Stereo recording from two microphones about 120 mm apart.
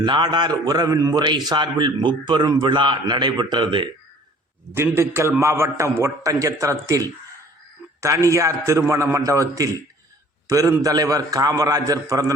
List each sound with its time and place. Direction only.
0.0 s a man's voice: 35° right (ahead or behind)
4.7 s a man's voice: 20° right (ahead or behind)
8.3 s a man's voice: 25° right (ahead or behind)